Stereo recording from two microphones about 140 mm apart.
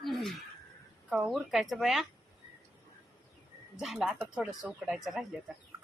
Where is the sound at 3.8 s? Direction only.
Centre (ahead or behind).